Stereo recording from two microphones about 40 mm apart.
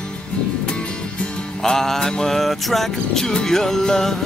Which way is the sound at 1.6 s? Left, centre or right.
Centre.